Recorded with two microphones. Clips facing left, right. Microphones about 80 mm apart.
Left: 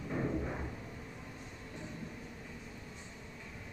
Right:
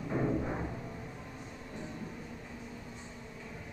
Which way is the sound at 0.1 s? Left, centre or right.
Right.